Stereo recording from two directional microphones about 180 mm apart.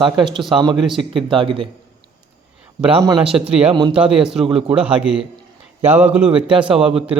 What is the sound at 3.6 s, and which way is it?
Speech, 30° right (ahead or behind).